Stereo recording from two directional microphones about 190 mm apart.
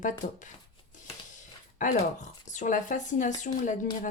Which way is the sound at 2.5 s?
40° left (ahead or behind).